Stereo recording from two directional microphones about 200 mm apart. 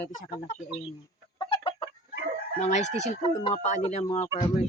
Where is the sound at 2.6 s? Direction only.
35° left (ahead or behind).